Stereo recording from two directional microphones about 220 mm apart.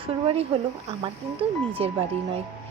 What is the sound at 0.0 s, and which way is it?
Speech, 25° right (ahead or behind).